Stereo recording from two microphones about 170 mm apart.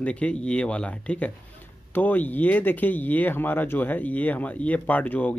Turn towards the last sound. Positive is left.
turn(degrees=10)  # may be behind; listen again after turning